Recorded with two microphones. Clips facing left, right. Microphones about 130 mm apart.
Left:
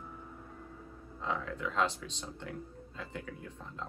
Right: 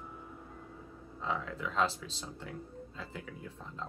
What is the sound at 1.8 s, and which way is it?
Speech, 35° right (ahead or behind).